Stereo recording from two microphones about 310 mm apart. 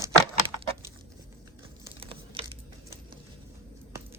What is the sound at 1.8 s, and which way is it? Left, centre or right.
Crumpling, centre.